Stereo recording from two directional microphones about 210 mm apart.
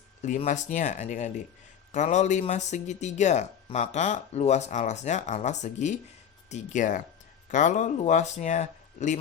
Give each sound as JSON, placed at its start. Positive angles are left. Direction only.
{"t": 0.2, "sound": "speech", "side_deg": 35}